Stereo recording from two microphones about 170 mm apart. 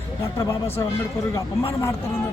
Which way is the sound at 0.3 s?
15° left (ahead or behind).